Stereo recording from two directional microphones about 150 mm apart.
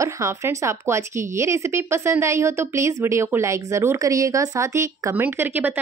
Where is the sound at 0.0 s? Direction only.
20° right (ahead or behind).